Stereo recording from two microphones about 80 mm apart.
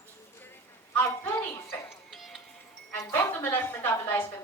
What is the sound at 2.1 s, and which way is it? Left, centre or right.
Music, centre.